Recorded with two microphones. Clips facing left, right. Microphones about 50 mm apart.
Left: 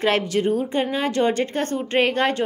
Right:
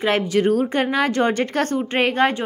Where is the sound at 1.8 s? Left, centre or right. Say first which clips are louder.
Left 1 dB; right.